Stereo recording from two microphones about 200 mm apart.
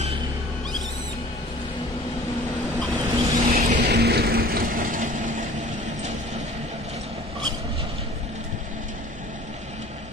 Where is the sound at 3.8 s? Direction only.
55° right (ahead or behind).